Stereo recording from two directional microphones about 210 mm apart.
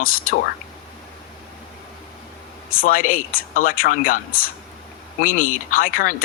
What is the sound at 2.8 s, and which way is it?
Speech, 40° left (ahead or behind).